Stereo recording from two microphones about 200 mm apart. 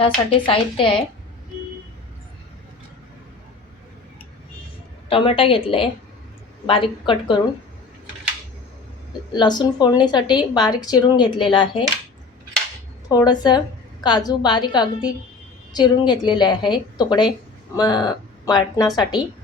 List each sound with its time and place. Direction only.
0.0 s a woman's voice: 25° left (ahead or behind)
5.0 s a woman's voice: 25° left (ahead or behind)
9.3 s a woman's voice: 20° left (ahead or behind)
13.1 s a woman's voice: 20° left (ahead or behind)